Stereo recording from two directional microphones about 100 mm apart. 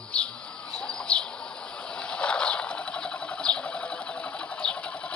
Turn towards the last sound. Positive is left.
turn(degrees=10)  # may be behind; listen again after turning